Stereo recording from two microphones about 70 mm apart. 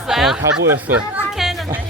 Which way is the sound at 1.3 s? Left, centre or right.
Centre.